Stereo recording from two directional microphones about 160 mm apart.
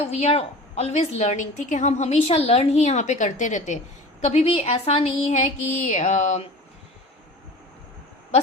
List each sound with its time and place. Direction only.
0.1 s a woman's voice: 40° left (ahead or behind)